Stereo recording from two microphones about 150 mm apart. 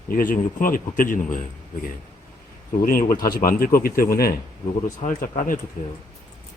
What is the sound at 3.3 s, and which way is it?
Speech, 80° left.